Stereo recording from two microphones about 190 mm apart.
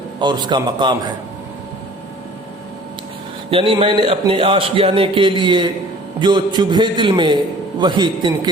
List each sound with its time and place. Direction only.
0.2 s a man's voice: 25° right (ahead or behind)
3.5 s a man's voice: 25° right (ahead or behind)